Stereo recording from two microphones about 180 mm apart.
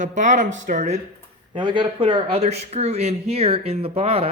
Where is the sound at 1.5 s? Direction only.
25° right (ahead or behind).